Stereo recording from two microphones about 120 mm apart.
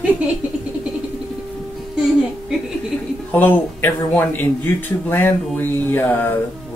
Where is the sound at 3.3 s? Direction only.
15° left (ahead or behind).